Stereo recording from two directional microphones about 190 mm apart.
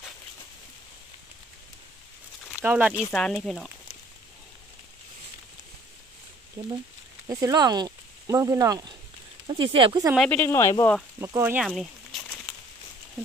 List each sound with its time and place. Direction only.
2.6 s speech: 10° right (ahead or behind)
3.1 s speech: centre (ahead or behind)
6.6 s speech: 15° right (ahead or behind)
10.1 s speech: 5° left (ahead or behind)
11.1 s speech: 15° right (ahead or behind)
11.6 s a sound: centre (ahead or behind)